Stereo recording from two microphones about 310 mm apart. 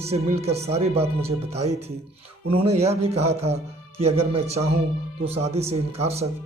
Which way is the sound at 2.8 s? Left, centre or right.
Centre.